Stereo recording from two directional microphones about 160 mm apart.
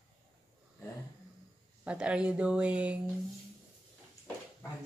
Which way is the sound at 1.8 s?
5° right (ahead or behind).